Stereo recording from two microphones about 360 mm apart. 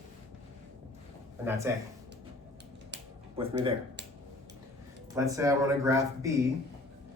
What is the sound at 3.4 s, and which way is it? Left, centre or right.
Speech, centre.